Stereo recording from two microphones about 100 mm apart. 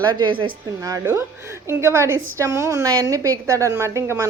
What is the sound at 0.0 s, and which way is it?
Speech, 45° right (ahead or behind).